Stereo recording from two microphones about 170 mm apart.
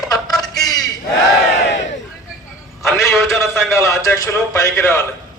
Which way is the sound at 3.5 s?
15° left (ahead or behind).